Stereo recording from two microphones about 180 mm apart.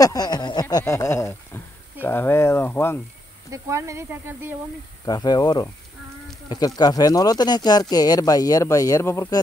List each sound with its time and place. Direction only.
0.0 s a sound: 20° left (ahead or behind)
3.4 s speech: 15° right (ahead or behind)
5.0 s speech: 25° left (ahead or behind)